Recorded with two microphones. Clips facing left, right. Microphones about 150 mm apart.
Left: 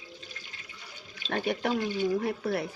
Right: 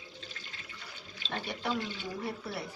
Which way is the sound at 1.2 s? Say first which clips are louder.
Left 7 dB; 45° left (ahead or behind).